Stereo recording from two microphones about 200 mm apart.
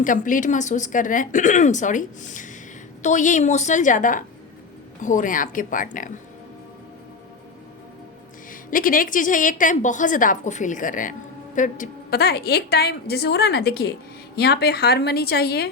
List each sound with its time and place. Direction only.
0.0 s a woman's voice: 40° left (ahead or behind)
8.7 s a woman's voice: 45° left (ahead or behind)